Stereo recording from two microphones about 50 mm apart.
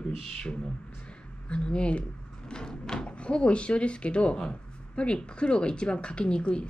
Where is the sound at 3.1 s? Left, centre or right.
Left.